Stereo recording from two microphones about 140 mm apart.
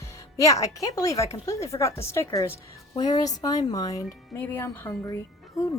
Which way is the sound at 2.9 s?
30° left (ahead or behind).